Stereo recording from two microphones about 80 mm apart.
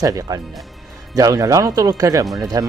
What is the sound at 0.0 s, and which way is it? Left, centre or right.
Speech, right.